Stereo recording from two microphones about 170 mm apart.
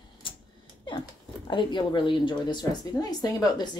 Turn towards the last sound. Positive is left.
turn(degrees=25)  # may be behind; listen again after turning